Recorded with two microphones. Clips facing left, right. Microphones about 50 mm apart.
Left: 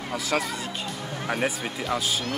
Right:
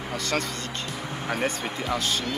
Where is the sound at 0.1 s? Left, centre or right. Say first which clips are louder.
Left 2 dB; centre.